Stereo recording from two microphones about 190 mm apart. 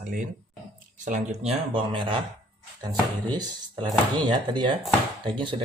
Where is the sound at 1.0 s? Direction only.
40° right (ahead or behind).